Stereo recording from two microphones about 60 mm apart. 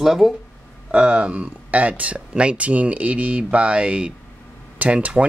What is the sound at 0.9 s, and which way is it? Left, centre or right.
Speech, right.